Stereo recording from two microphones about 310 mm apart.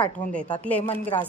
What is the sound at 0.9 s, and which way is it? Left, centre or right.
Speech, centre.